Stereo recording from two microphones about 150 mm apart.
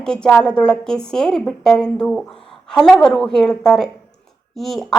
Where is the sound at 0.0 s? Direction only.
5° left (ahead or behind).